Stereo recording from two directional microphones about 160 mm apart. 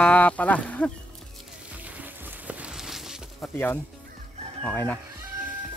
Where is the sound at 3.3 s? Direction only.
10° left (ahead or behind).